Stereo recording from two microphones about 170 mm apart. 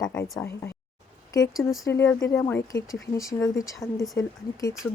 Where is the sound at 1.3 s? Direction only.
20° left (ahead or behind).